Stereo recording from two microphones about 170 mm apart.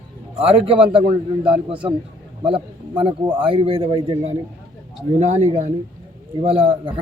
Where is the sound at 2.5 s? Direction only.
30° right (ahead or behind).